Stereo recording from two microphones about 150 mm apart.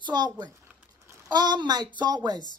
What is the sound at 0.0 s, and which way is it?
A child's voice, 30° right (ahead or behind).